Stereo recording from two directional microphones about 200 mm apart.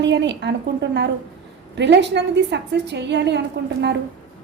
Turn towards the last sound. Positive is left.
turn(degrees=-60)  # may be behind; listen again after turning